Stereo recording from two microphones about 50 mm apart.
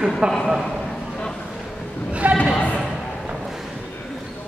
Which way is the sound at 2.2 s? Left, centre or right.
Right.